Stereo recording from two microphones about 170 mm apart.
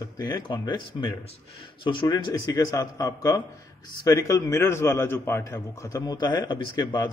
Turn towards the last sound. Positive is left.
turn(degrees=25)  # may be behind; listen again after turning